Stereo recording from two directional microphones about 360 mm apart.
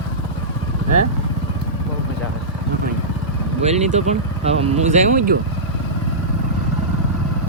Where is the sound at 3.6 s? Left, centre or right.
Centre.